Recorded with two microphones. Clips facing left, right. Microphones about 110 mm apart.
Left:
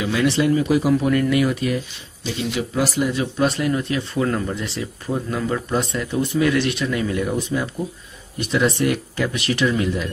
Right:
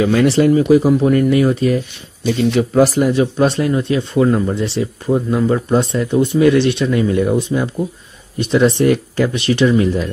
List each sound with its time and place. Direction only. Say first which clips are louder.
0.0 s speech: right 7 dB; 45° right (ahead or behind)
2.2 s speech: right 10 dB; 50° right (ahead or behind)
3.1 s speech: right 6 dB; 30° right (ahead or behind)